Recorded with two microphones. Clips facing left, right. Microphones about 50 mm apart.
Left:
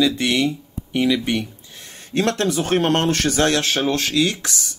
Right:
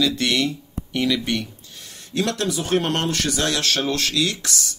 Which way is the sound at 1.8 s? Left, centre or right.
Left.